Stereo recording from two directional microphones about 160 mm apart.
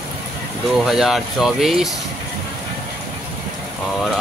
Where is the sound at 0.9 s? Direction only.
Centre (ahead or behind).